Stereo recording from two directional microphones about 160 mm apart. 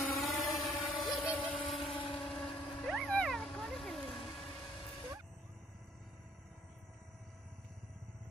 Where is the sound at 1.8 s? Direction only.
35° left (ahead or behind).